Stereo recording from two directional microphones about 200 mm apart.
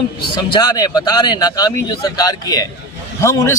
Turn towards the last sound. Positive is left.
turn(degrees=15)  # may be behind; listen again after turning